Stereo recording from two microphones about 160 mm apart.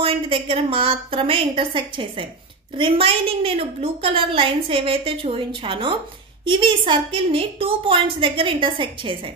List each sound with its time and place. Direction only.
0.0 s a woman's voice: 35° right (ahead or behind)